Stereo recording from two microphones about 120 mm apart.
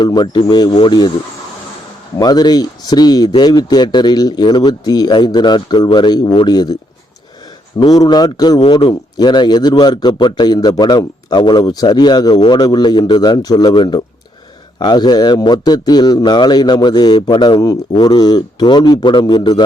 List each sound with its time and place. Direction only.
0.0 s a man's voice: 40° left (ahead or behind)
2.1 s a man's voice: 35° left (ahead or behind)
7.8 s a man's voice: 35° left (ahead or behind)